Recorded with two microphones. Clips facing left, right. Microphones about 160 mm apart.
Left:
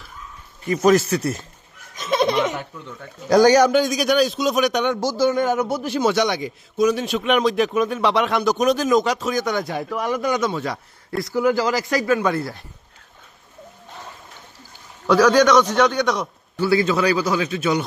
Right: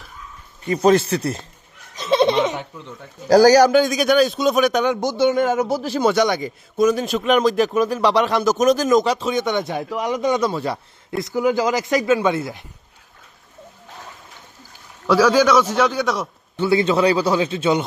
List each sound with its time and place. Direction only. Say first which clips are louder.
0.7 s speech: right 1 dB; 30° right (ahead or behind)
2.0 s laughter: right 3 dB; 30° right (ahead or behind)
3.2 s a man's voice: right 2 dB; 35° right (ahead or behind)
3.7 s a man's voice: right 2 dB; centre (ahead or behind)
4.9 s speech: right 1 dB; 20° right (ahead or behind)
5.2 s a man's voice: right 2 dB; centre (ahead or behind)
9.9 s speech: right 2 dB; 15° right (ahead or behind)
15.0 s a man's voice: even; 5° right (ahead or behind)
16.6 s speech: right 2 dB; 25° right (ahead or behind)